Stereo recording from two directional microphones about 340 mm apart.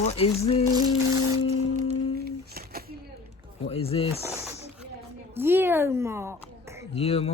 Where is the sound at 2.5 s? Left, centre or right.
Right.